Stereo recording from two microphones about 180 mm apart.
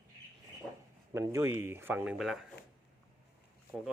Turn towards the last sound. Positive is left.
turn(degrees=0)  # may be behind; listen again after turning